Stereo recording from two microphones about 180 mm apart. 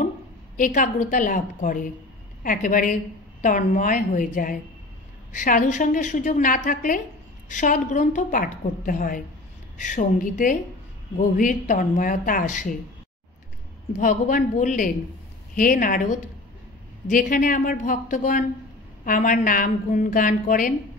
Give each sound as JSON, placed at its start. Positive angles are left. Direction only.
{"t": 0.6, "sound": "a woman's voice", "side_deg": 45}
{"t": 13.9, "sound": "a woman's voice", "side_deg": 45}